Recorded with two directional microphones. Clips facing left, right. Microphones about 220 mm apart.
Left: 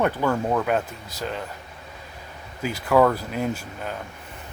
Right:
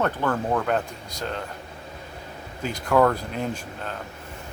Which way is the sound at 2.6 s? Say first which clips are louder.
Left 1 dB; 5° left (ahead or behind).